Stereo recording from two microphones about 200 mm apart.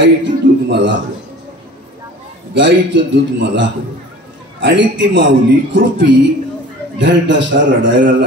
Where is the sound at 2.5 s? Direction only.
60° right (ahead or behind).